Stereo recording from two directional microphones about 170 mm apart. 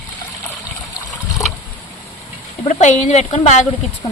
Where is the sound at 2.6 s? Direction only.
45° left (ahead or behind).